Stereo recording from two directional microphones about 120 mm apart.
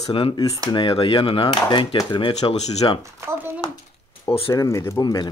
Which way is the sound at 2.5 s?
65° left (ahead or behind).